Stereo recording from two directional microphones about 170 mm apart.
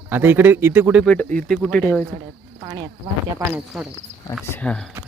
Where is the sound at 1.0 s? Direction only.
10° left (ahead or behind).